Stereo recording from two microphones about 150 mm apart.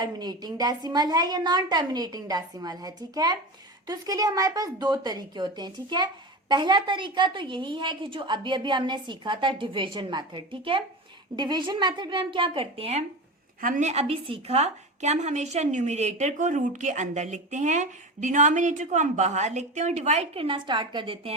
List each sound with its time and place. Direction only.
0.0 s a woman's voice: 25° right (ahead or behind); by 13.1 s 45° right (ahead or behind)
13.6 s a woman's voice: 60° right (ahead or behind); by 21.3 s 35° right (ahead or behind)